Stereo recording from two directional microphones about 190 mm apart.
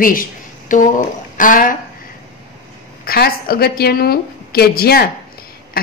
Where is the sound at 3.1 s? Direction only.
50° left (ahead or behind).